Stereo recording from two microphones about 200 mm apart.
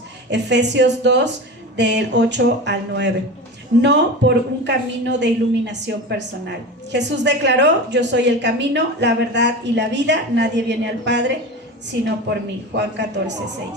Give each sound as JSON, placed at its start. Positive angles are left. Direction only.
{"t": 0.3, "sound": "a woman's voice", "side_deg": -60}
{"t": 12.7, "sound": "a woman's voice", "side_deg": -60}